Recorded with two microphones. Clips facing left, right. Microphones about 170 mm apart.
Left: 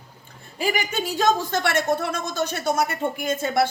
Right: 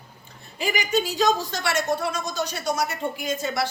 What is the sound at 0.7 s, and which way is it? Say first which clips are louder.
A woman's voice: right 1 dB; 50° left (ahead or behind).